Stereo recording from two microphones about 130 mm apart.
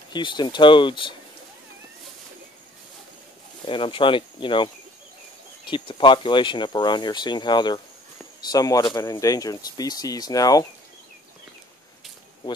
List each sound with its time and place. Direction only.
0.1 s speech: 35° left (ahead or behind)
3.6 s speech: 40° left (ahead or behind)
5.7 s speech: 40° left (ahead or behind)